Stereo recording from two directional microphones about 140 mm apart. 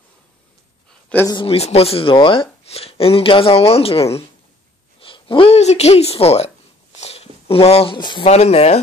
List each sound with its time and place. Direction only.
1.2 s speech: 35° left (ahead or behind)
8.3 s speech: 50° left (ahead or behind)